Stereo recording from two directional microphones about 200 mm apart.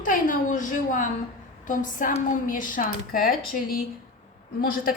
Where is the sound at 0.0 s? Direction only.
40° left (ahead or behind).